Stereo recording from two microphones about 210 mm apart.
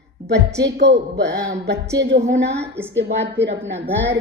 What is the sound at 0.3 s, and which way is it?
Speech, 55° right (ahead or behind).